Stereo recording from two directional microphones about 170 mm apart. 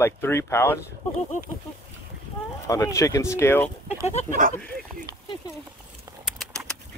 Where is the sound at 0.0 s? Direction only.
15° left (ahead or behind).